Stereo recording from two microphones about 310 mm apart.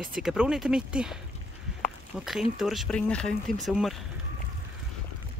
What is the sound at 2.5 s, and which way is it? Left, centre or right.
A woman's voice, centre.